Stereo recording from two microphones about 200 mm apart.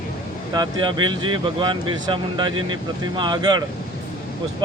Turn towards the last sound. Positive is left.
turn(degrees=-20)  # may be behind; listen again after turning